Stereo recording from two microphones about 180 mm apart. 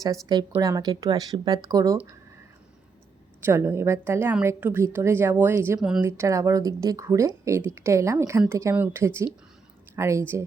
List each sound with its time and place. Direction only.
0.5 s speech: 15° right (ahead or behind)
3.4 s speech: 15° right (ahead or behind)
5.8 s a woman's voice: 5° right (ahead or behind)
6.1 s speech: 15° right (ahead or behind)